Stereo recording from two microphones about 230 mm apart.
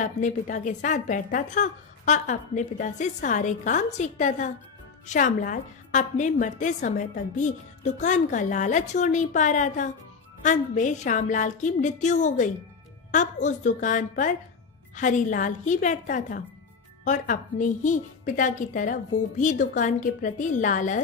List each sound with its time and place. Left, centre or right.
0.0 s a woman's voice: left